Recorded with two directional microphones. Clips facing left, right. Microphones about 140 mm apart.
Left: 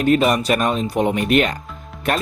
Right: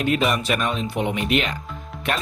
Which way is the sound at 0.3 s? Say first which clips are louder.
Left 5 dB; 40° left (ahead or behind).